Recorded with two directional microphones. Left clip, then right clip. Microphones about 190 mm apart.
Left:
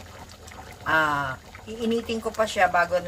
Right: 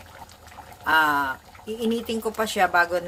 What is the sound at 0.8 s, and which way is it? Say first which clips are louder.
Speech: right 3 dB; 60° right (ahead or behind).